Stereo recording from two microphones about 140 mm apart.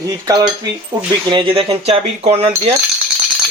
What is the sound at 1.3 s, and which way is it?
Speech, 40° right (ahead or behind).